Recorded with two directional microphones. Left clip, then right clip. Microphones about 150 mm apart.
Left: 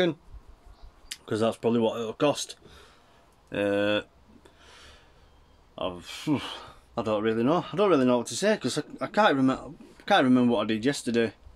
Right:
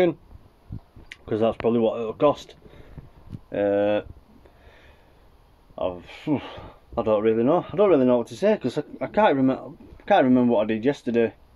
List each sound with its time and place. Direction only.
1.0 s speech: 10° left (ahead or behind)
3.5 s speech: 15° left (ahead or behind)
5.8 s speech: 15° left (ahead or behind)